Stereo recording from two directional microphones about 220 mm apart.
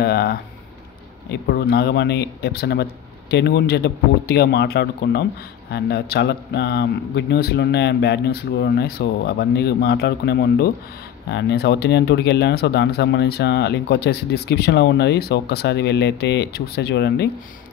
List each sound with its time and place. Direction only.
0.0 s speech: 45° left (ahead or behind)